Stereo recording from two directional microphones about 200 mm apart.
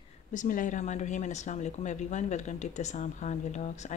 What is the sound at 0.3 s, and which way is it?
A woman's voice, 40° left (ahead or behind).